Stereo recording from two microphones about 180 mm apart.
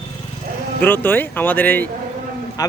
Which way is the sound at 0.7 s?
10° left (ahead or behind).